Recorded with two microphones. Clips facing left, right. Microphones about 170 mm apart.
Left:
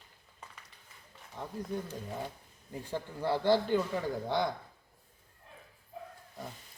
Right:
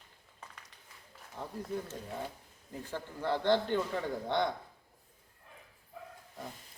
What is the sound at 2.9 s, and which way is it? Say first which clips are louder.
A man's voice: left 2 dB; 10° left (ahead or behind).